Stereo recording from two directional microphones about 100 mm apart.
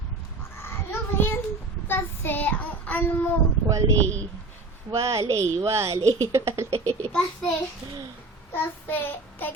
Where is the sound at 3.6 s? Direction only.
30° right (ahead or behind).